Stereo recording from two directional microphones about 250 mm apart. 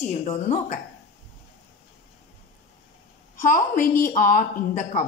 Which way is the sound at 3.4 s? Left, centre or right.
Left.